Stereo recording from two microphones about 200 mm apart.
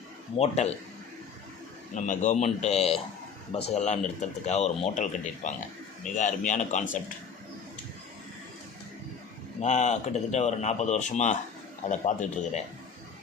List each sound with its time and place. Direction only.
0.3 s speech: 30° left (ahead or behind)
2.0 s speech: 40° left (ahead or behind)
9.6 s speech: 35° left (ahead or behind)